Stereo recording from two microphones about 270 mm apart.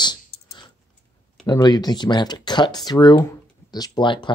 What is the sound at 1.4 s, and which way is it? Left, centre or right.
Speech, centre.